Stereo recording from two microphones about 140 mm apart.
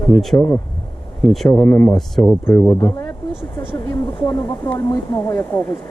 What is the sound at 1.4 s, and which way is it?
Speech, 15° left (ahead or behind).